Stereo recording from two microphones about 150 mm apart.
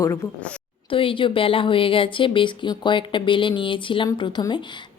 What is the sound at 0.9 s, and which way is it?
Speech, 35° left (ahead or behind).